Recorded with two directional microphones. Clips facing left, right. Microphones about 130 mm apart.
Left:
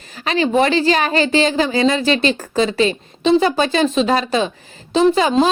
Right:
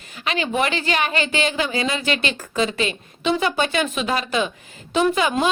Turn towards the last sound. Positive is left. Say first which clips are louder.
# left 5 dB
turn(degrees=30)  # may be behind; listen again after turning